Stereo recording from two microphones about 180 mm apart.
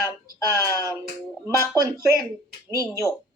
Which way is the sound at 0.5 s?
15° left (ahead or behind).